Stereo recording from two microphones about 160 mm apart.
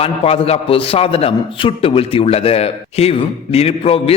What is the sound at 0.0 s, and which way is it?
A man's voice, 40° left (ahead or behind).